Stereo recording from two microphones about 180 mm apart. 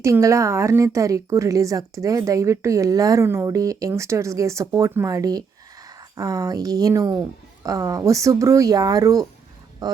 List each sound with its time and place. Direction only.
0.0 s a woman's voice: 15° right (ahead or behind)